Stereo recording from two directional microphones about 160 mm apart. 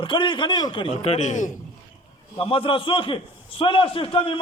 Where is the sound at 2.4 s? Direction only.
35° left (ahead or behind).